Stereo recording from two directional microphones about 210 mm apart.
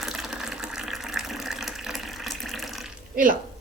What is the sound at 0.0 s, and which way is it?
Water, centre (ahead or behind).